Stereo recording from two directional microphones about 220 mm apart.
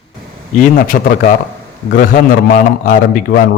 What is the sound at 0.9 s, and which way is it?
A man's voice, 40° left (ahead or behind).